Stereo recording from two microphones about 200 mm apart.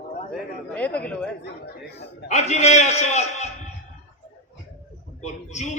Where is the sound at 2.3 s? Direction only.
35° left (ahead or behind).